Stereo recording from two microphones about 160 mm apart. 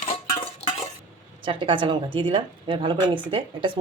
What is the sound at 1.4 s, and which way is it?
A woman's voice, 30° right (ahead or behind).